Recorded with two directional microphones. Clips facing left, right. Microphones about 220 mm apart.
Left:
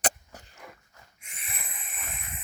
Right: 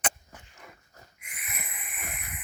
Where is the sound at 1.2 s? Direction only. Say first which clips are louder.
Right 1 dB; 25° left (ahead or behind).